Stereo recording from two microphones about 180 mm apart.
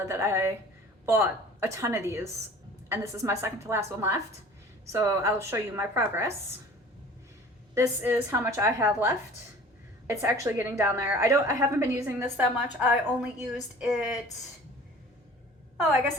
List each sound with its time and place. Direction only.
0.1 s a woman's voice: 15° right (ahead or behind)
7.8 s a woman's voice: 15° right (ahead or behind)